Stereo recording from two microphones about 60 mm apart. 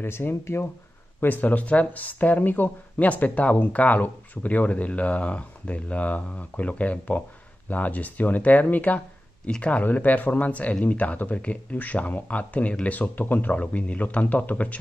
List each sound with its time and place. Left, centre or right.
0.0 s speech: left
1.2 s speech: left